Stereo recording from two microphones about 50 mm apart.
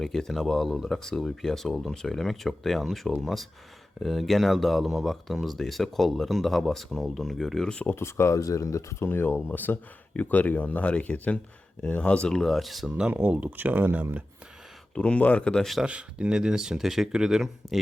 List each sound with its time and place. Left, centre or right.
0.0 s speech: centre
7.9 s speech: left
9.0 s speech: left
10.2 s speech: left
12.3 s speech: centre
13.1 s speech: right
14.9 s speech: left
15.9 s speech: right
17.6 s speech: centre